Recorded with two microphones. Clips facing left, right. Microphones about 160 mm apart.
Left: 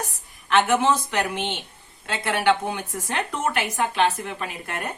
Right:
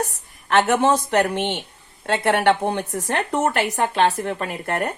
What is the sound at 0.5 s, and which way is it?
Speech, 55° right (ahead or behind).